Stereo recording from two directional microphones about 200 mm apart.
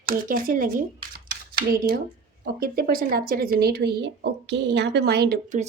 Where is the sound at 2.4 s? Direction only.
50° right (ahead or behind).